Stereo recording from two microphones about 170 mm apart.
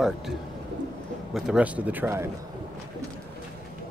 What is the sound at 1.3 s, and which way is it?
Speech, 5° right (ahead or behind).